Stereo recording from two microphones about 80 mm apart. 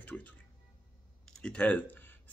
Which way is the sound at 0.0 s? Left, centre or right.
Centre.